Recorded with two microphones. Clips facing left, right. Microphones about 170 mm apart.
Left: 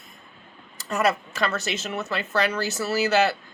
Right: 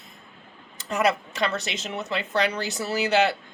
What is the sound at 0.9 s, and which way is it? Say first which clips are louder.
Speech: even; 20° right (ahead or behind).